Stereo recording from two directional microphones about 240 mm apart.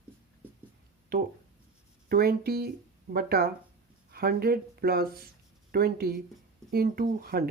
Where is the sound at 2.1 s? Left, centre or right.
Right.